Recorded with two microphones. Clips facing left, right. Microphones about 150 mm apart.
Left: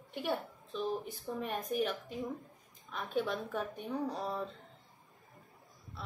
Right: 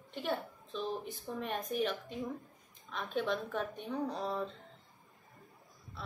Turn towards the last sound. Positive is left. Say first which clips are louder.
# right 1 dB
turn(degrees=5)  # may be behind; listen again after turning